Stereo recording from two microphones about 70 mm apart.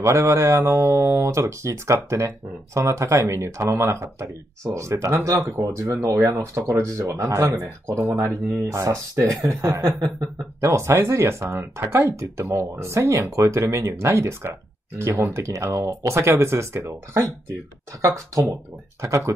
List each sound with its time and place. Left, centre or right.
0.0 s speech: right